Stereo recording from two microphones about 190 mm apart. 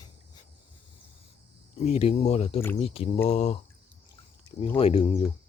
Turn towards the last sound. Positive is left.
turn(degrees=30)  # may be behind; listen again after turning